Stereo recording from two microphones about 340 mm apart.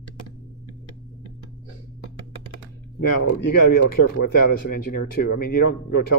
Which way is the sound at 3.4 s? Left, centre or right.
Left.